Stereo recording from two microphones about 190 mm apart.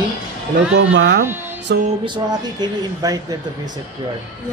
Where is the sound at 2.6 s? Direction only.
20° right (ahead or behind).